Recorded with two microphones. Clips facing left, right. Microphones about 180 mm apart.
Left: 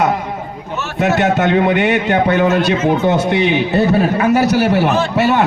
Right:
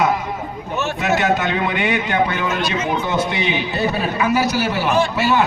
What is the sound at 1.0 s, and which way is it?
A man's voice, 60° left (ahead or behind).